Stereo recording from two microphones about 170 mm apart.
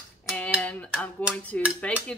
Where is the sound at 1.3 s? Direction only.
10° left (ahead or behind).